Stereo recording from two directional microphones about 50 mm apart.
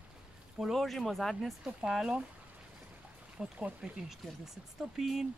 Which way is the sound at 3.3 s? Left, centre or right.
Right.